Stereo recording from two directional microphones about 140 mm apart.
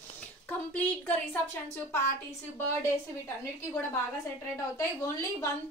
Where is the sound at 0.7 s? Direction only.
10° left (ahead or behind).